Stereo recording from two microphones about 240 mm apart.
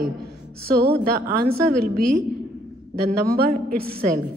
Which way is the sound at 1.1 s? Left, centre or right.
Right.